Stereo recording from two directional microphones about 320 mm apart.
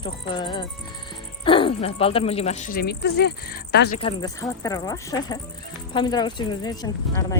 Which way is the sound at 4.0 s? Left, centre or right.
Centre.